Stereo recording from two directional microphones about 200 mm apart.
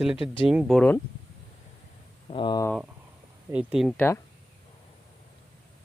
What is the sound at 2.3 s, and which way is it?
Speech, 25° left (ahead or behind).